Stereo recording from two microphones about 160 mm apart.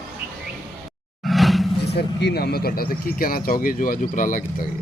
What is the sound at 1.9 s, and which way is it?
Speech, 90° left.